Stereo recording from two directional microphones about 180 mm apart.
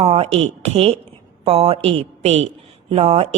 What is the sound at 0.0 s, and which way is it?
Speech, 35° right (ahead or behind).